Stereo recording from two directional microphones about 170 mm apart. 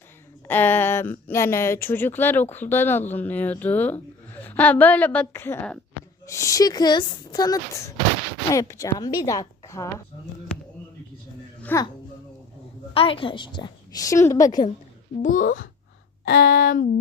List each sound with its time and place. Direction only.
0.4 s a woman's voice: 10° left (ahead or behind)
11.6 s speech: 15° left (ahead or behind)
12.9 s a woman's voice: 30° left (ahead or behind)
15.2 s a child's voice: 50° left (ahead or behind)
16.2 s a sound: 75° left (ahead or behind); by 16.9 s 55° left (ahead or behind)